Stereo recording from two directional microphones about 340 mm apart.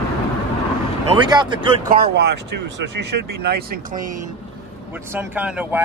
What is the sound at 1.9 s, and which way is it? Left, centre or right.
Speech, right.